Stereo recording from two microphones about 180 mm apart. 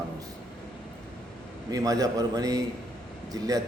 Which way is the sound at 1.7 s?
20° right (ahead or behind).